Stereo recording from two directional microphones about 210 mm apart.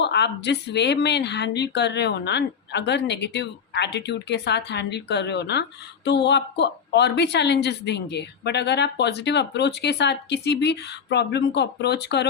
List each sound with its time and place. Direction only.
0.0 s speech: 55° left (ahead or behind)